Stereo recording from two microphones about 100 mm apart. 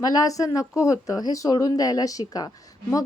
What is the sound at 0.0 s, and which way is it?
Speech, 35° left (ahead or behind).